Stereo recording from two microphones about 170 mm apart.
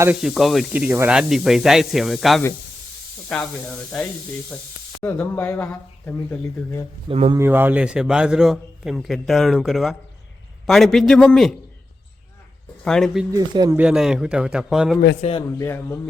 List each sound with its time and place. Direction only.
0.0 s a man's voice: 5° right (ahead or behind)
5.0 s speech: 10° left (ahead or behind)
7.1 s speech: 35° right (ahead or behind)
7.3 s a man's voice: 15° right (ahead or behind)
12.8 s speech: 5° left (ahead or behind)
13.3 s speech: 20° right (ahead or behind)
13.7 s a man's voice: 5° right (ahead or behind)
15.4 s speech: 15° left (ahead or behind)